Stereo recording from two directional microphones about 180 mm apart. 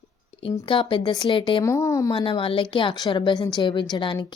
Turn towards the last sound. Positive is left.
turn(degrees=25)  # may be behind; listen again after turning